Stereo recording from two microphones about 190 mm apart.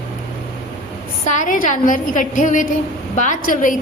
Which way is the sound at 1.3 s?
40° left (ahead or behind).